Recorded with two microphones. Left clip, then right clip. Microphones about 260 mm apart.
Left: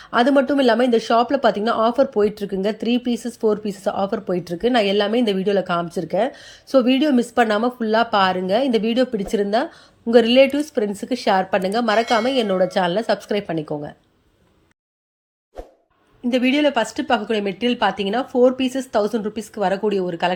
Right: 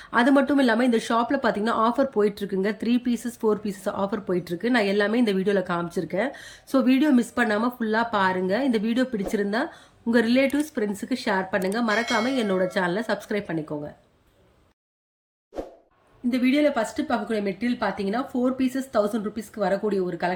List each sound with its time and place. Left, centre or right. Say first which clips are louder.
0.0 s a woman's voice: left 4 dB; centre
15.5 s plop: right 3 dB; centre
16.3 s a woman's voice: left 4 dB; centre